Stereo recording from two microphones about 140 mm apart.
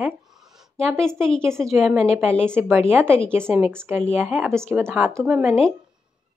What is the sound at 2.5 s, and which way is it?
Speech, 15° right (ahead or behind).